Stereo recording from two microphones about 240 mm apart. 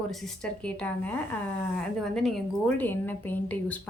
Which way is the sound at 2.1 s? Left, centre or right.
Centre.